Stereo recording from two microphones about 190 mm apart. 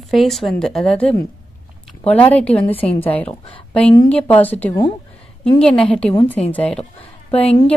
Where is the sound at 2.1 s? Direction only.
5° left (ahead or behind).